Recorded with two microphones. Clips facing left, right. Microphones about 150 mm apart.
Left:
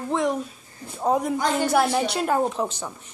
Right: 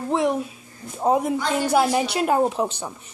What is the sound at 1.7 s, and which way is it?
Speech, 10° right (ahead or behind).